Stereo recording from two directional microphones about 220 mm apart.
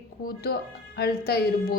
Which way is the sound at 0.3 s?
45° left (ahead or behind).